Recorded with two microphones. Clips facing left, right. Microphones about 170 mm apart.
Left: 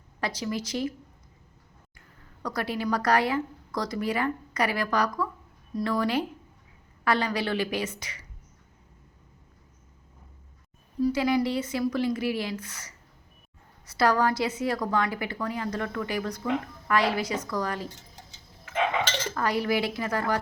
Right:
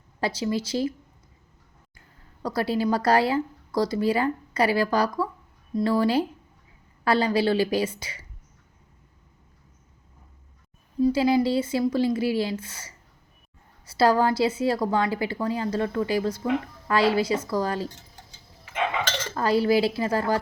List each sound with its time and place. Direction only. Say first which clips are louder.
0.2 s a woman's voice: right 4 dB; 30° right (ahead or behind)
2.4 s a woman's voice: right 5 dB; 30° right (ahead or behind)
11.0 s a woman's voice: right 4 dB; 30° right (ahead or behind)
19.3 s a woman's voice: right 7 dB; 30° right (ahead or behind)